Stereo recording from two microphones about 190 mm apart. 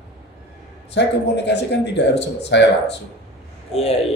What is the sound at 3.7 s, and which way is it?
Speech, 30° left (ahead or behind).